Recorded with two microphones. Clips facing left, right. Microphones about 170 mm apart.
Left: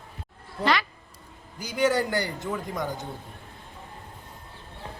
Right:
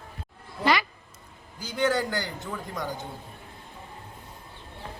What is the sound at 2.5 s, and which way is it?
Speech, centre (ahead or behind).